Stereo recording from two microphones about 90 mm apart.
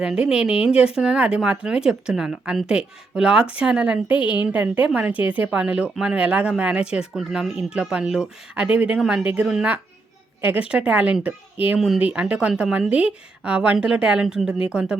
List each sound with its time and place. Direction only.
0.0 s speech: 5° right (ahead or behind)
4.2 s a woman's voice: 65° left (ahead or behind)
4.4 s a woman's voice: 15° right (ahead or behind)